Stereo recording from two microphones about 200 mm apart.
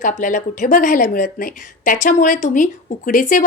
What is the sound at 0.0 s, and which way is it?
A woman's voice, 40° left (ahead or behind).